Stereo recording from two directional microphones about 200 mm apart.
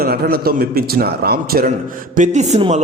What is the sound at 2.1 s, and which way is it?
Speech, 40° right (ahead or behind).